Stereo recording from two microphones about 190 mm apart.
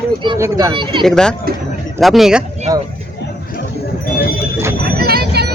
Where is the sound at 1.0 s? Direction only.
5° left (ahead or behind).